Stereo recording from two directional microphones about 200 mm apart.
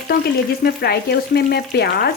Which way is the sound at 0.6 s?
50° left (ahead or behind).